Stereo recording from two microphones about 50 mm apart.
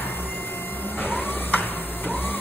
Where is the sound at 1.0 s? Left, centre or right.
Left.